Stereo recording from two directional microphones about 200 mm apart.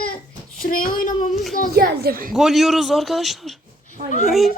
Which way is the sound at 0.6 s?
45° left (ahead or behind).